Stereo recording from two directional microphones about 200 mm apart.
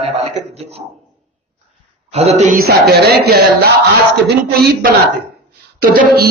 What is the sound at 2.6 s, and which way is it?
Speech, 50° right (ahead or behind).